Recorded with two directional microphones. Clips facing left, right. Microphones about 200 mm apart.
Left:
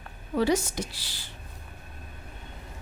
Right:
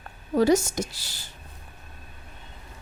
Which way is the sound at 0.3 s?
45° right (ahead or behind).